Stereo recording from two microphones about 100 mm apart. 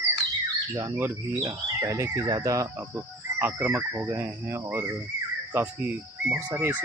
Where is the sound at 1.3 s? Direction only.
35° right (ahead or behind).